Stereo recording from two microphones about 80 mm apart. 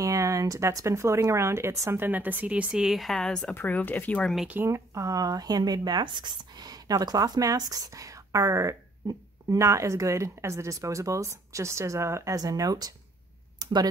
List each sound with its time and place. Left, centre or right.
0.0 s a woman's voice: right; by 3.5 s centre
3.5 s speech: left
4.6 s speech: right
12.4 s speech: right
13.6 s a sound: right